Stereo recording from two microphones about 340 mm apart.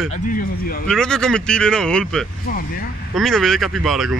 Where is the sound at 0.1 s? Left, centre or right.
Left.